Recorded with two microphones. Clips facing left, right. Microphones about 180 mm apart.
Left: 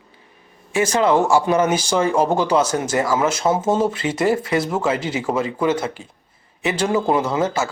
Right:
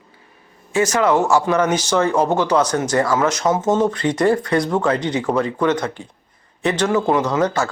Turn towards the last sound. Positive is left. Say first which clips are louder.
# right 1 dB
turn(degrees=5)  # may be behind; listen again after turning